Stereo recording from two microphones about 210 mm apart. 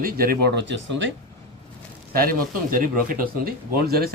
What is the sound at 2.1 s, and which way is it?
Speech, 45° right (ahead or behind).